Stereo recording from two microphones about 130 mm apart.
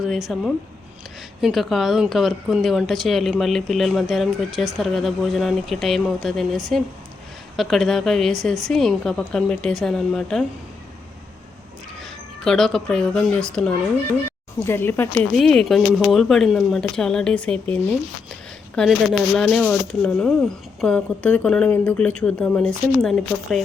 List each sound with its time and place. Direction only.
0.0 s speech: centre (ahead or behind)
12.5 s speech: 5° left (ahead or behind)
14.6 s speech: 15° left (ahead or behind)
15.4 s speech: 5° left (ahead or behind)
18.8 s speech: 5° left (ahead or behind)